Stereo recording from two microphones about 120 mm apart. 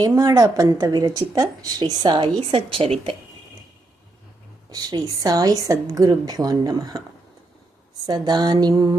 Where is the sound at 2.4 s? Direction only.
50° right (ahead or behind).